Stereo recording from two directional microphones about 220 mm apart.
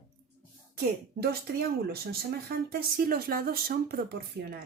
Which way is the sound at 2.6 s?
45° right (ahead or behind).